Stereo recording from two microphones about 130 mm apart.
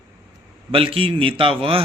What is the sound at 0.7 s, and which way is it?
Speech, 45° right (ahead or behind).